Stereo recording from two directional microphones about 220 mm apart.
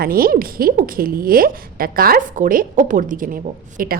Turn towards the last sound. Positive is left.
turn(degrees=-40)  # may be behind; listen again after turning